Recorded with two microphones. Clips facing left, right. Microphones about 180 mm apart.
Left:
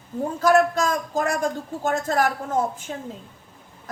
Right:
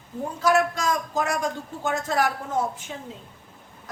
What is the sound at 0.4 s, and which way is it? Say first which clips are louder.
A woman's voice: left 3 dB; 50° left (ahead or behind).